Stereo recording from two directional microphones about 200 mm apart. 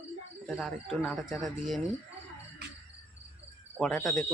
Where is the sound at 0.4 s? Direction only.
Centre (ahead or behind).